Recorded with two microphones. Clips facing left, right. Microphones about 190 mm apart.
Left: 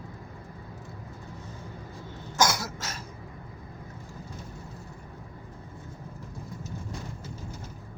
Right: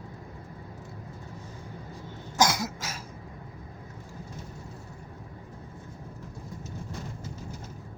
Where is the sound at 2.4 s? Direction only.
20° right (ahead or behind).